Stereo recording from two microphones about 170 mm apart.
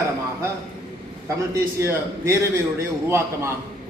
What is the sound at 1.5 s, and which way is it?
A man's voice, 15° right (ahead or behind).